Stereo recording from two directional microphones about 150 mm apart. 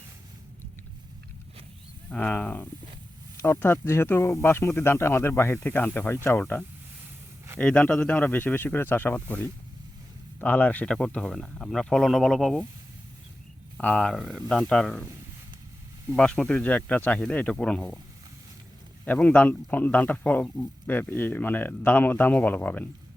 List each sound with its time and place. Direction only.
2.0 s speech: 10° left (ahead or behind)
13.7 s speech: 5° left (ahead or behind)
16.1 s speech: 5° left (ahead or behind)
19.0 s speech: 10° left (ahead or behind)